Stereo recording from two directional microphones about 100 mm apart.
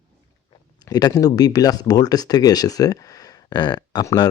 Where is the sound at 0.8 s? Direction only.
35° left (ahead or behind).